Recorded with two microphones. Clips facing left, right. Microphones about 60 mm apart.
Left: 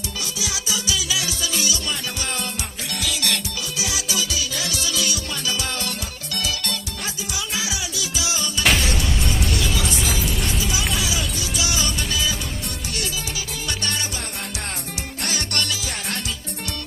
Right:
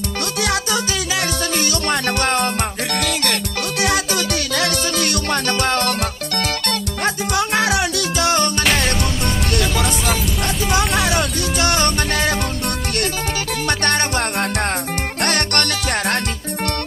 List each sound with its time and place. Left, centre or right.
0.4 s music: right
13.7 s music: right
15.2 s music: right